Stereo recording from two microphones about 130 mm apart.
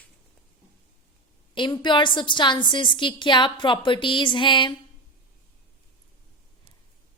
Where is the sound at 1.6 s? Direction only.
35° left (ahead or behind).